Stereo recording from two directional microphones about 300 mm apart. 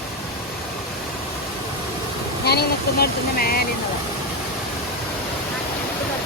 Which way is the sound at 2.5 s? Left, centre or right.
Left.